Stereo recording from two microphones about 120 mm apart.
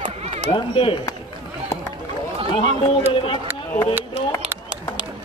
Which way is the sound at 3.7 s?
20° left (ahead or behind).